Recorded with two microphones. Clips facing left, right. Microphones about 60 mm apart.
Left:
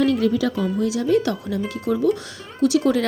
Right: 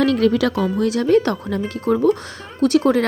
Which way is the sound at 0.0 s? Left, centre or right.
Right.